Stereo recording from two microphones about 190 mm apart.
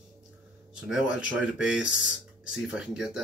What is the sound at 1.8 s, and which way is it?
Speech, 80° left.